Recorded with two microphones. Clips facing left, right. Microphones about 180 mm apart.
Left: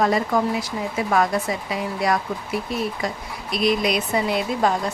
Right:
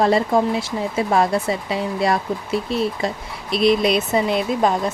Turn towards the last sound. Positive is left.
turn(degrees=-20)  # may be behind; listen again after turning